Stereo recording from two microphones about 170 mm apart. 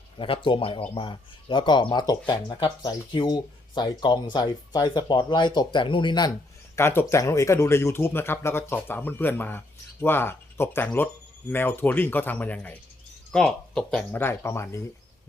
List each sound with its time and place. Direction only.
0.2 s speech: 30° left (ahead or behind)
6.7 s speech: 15° left (ahead or behind)